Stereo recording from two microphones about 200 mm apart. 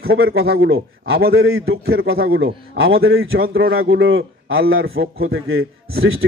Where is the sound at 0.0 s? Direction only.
50° right (ahead or behind).